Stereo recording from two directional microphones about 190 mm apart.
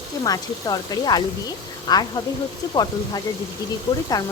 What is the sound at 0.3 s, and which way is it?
Speech, 20° left (ahead or behind).